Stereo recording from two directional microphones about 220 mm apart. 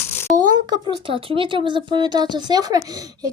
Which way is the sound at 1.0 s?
25° right (ahead or behind).